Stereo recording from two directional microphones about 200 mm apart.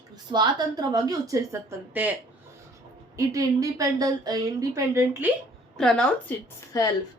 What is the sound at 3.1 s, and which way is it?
A woman's voice, 15° right (ahead or behind).